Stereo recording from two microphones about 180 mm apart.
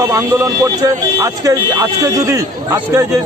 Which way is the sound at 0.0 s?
15° right (ahead or behind).